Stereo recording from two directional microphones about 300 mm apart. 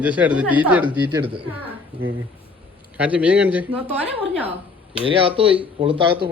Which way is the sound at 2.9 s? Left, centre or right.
Centre.